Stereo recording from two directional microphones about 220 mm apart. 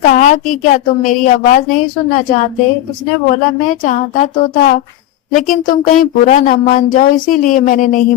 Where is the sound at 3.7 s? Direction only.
35° left (ahead or behind).